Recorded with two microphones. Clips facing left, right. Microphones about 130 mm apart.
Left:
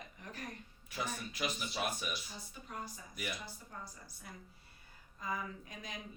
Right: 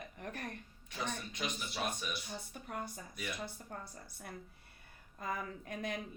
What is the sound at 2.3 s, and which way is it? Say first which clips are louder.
A woman's voice: right 4 dB; 60° right (ahead or behind).